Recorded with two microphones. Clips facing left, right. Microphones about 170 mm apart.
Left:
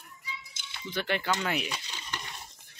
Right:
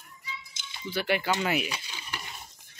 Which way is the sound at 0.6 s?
55° left (ahead or behind).